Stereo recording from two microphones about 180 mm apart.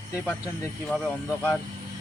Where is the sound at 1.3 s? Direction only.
10° left (ahead or behind).